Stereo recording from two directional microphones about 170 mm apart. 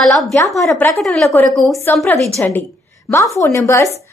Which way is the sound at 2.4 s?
15° left (ahead or behind).